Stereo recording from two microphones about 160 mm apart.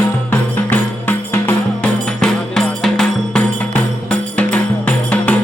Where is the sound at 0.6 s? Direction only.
10° left (ahead or behind).